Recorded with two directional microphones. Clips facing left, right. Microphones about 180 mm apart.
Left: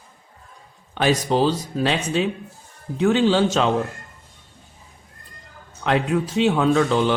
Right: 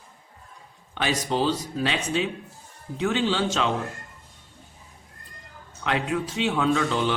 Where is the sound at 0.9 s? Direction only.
45° left (ahead or behind).